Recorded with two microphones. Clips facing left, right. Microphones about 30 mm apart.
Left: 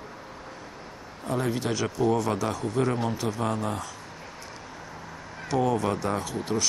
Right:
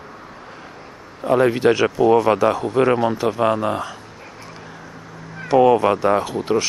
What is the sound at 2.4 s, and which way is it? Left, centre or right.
A man's voice, right.